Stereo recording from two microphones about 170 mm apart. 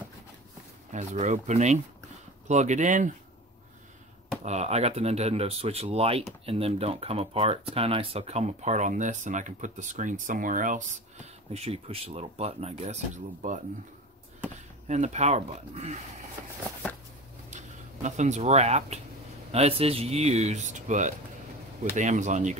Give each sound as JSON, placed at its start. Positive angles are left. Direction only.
{"t": 0.9, "sound": "speech", "side_deg": -45}
{"t": 4.4, "sound": "speech", "side_deg": -40}
{"t": 14.9, "sound": "speech", "side_deg": -45}
{"t": 17.5, "sound": "speech", "side_deg": -45}